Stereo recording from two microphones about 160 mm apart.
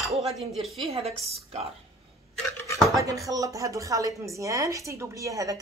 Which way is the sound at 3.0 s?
20° right (ahead or behind).